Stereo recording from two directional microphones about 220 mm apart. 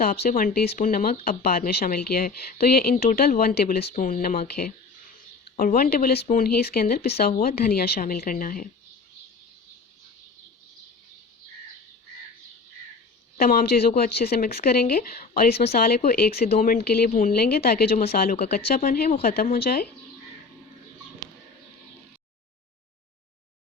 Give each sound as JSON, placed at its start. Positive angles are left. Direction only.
{"t": 0.0, "sound": "a woman's voice", "side_deg": 40}
{"t": 13.3, "sound": "a woman's voice", "side_deg": 40}
{"t": 16.4, "sound": "a woman's voice", "side_deg": 30}